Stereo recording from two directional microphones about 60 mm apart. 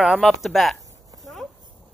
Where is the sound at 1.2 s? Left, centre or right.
Centre.